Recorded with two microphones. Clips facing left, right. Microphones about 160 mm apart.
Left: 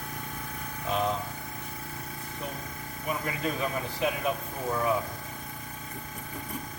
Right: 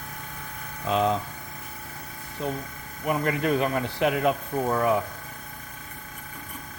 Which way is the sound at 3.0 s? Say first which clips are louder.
Right 7 dB; 65° right (ahead or behind).